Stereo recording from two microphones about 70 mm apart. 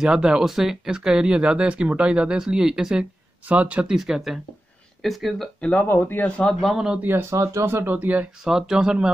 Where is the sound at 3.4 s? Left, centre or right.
Right.